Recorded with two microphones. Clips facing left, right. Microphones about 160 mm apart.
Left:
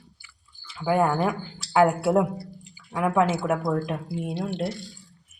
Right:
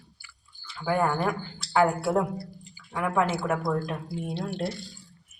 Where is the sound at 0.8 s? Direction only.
15° left (ahead or behind).